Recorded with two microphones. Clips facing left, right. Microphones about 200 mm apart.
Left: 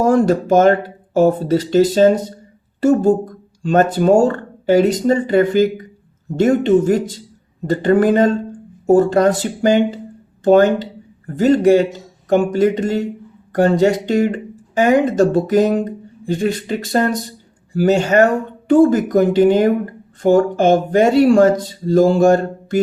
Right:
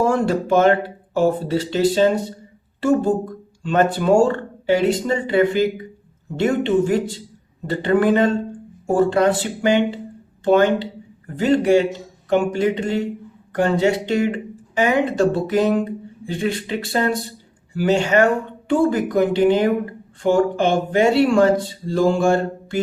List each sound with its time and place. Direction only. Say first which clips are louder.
0.0 s speech: left 5 dB; 40° left (ahead or behind)